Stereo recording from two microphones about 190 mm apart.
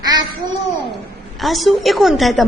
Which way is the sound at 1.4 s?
Centre (ahead or behind).